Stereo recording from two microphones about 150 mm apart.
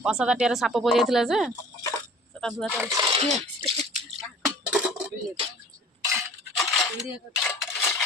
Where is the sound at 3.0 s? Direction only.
40° right (ahead or behind).